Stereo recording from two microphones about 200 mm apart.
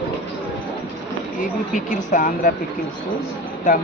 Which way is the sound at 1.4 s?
40° left (ahead or behind).